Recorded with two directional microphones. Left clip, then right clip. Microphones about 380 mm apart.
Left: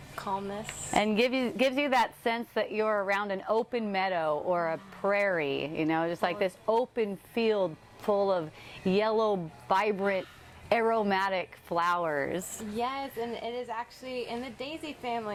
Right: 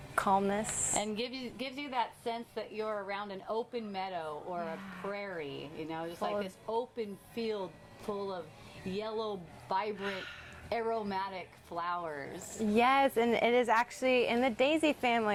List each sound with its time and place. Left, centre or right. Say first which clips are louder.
0.2 s speech: right 5 dB; right
0.9 s a woman's voice: left 12 dB; left
12.7 s a woman's voice: right 6 dB; right